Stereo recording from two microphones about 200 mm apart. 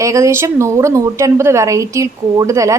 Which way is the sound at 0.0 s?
15° right (ahead or behind).